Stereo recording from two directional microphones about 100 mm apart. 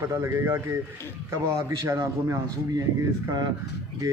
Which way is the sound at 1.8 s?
30° right (ahead or behind).